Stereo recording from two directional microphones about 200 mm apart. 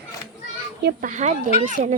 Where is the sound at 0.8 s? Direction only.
55° right (ahead or behind).